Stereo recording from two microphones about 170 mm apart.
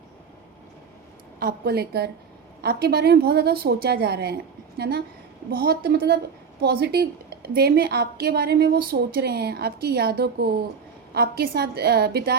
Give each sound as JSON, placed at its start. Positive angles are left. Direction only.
{"t": 1.4, "sound": "a woman's voice", "side_deg": -65}